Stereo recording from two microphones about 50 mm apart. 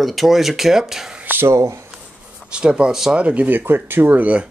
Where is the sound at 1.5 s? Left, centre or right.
Right.